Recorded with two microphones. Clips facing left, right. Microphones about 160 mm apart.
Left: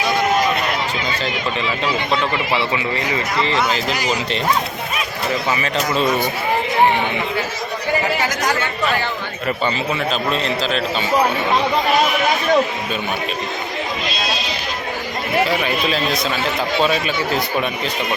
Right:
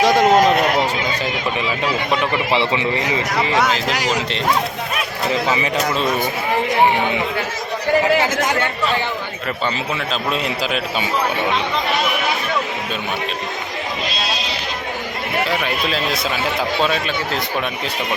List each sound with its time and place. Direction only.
0.0 s run: 90° right
2.5 s a man's voice: 20° right (ahead or behind)
3.4 s a man's voice: 10° right (ahead or behind)
3.9 s speech: 85° right
5.5 s a man's voice: 20° right (ahead or behind)
10.3 s a man's voice: 10° right (ahead or behind)
15.4 s speech: centre (ahead or behind)